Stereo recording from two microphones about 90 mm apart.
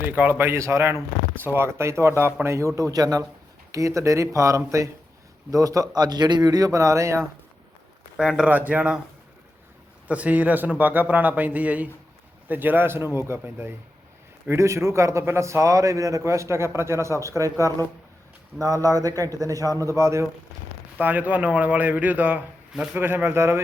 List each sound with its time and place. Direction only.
0.0 s a man's voice: 20° right (ahead or behind)
8.1 s speech: 5° right (ahead or behind)
8.4 s a man's voice: 15° right (ahead or behind)
10.1 s a man's voice: 15° right (ahead or behind); by 20.2 s 35° right (ahead or behind)
21.0 s a man's voice: 20° right (ahead or behind)